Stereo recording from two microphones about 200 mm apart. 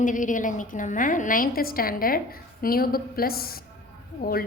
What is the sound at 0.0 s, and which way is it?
A woman's voice, 40° left (ahead or behind).